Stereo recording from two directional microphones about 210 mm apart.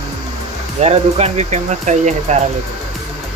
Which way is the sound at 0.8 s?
30° right (ahead or behind).